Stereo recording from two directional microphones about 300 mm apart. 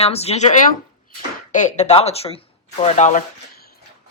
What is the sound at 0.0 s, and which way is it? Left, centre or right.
Speech, centre.